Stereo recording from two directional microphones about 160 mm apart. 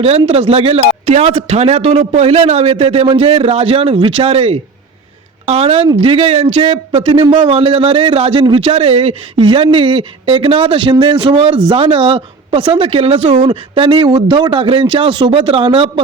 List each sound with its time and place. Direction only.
0.3 s a man's voice: 40° right (ahead or behind)
13.5 s a man's voice: 30° right (ahead or behind)